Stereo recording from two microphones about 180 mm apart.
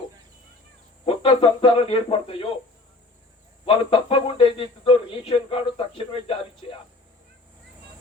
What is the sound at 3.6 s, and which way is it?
Speech, 30° left (ahead or behind).